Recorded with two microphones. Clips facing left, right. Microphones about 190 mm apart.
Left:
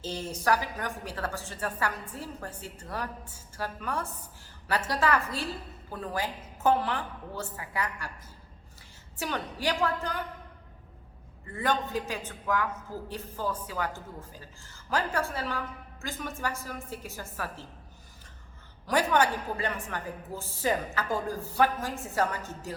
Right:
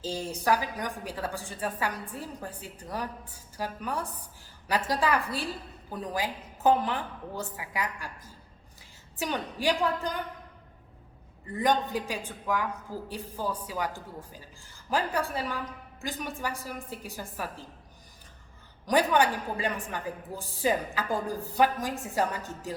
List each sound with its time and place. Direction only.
0.1 s a woman's voice: 15° right (ahead or behind)
9.1 s a woman's voice: 15° right (ahead or behind)
11.5 s a woman's voice: 15° right (ahead or behind)
18.9 s a woman's voice: 15° right (ahead or behind)